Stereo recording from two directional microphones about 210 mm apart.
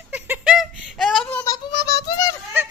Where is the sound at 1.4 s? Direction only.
20° left (ahead or behind).